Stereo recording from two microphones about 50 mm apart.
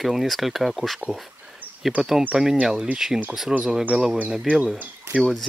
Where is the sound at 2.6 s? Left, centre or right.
Centre.